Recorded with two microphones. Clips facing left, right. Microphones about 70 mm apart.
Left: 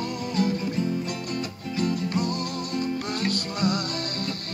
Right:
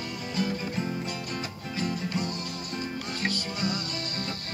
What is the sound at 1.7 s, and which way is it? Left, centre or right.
Music, left.